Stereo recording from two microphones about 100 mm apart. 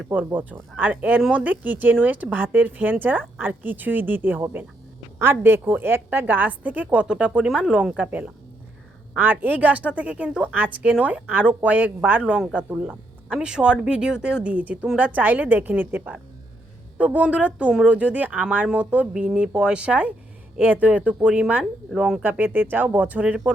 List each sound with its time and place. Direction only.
0.1 s speech: 15° right (ahead or behind)
12.2 s speech: 5° right (ahead or behind)
12.5 s speech: 15° right (ahead or behind)
22.2 s speech: 20° right (ahead or behind)